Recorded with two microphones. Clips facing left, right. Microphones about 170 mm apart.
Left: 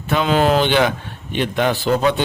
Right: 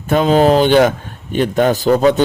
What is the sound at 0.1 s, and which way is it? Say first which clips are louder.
A man's voice: right 5 dB; 40° right (ahead or behind).